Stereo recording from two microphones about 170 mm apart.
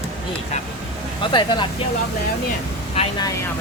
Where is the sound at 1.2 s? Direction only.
30° left (ahead or behind).